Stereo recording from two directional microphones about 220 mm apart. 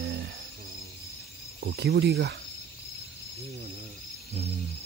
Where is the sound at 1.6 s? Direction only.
50° right (ahead or behind).